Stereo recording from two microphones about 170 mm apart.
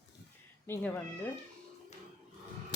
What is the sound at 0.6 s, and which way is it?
Speech, 10° left (ahead or behind).